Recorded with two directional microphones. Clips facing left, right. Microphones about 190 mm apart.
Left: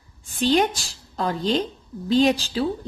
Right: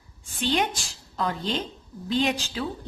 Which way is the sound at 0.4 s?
40° left (ahead or behind).